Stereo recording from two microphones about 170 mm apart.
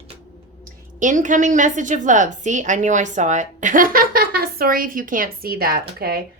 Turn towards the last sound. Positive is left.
turn(degrees=-65)  # may be behind; listen again after turning